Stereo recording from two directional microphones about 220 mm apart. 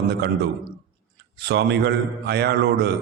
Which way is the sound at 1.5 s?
50° right (ahead or behind).